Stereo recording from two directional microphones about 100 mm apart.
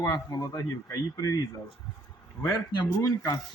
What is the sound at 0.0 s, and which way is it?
Speech, 35° left (ahead or behind).